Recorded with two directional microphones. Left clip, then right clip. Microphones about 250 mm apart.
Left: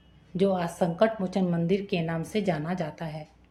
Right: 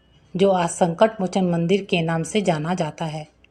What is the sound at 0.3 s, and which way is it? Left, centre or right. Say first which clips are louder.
A woman's voice: right 8 dB; right.